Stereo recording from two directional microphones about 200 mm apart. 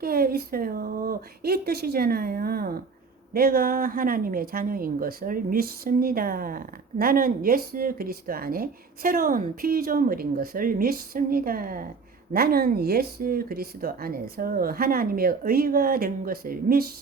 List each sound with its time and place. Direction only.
0.0 s speech: 50° right (ahead or behind)